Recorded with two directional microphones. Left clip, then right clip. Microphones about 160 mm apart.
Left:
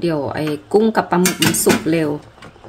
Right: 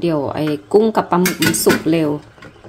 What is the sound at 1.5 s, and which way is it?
Speech, centre (ahead or behind).